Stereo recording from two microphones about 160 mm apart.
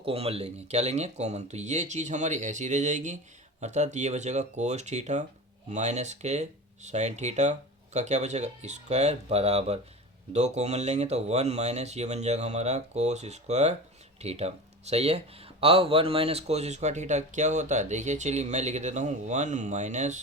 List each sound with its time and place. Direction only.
0.0 s speech: 35° right (ahead or behind)